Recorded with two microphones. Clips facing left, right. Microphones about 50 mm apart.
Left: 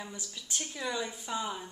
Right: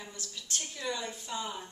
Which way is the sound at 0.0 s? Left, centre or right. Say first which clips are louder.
Left 2 dB; centre.